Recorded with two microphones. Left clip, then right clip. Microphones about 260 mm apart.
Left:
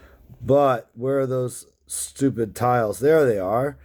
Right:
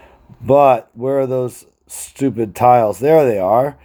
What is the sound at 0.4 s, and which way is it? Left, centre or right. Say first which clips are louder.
Speech: right 8 dB; right.